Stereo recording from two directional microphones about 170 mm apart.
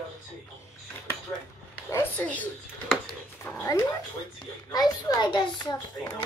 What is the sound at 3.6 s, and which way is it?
A child's voice, 15° left (ahead or behind).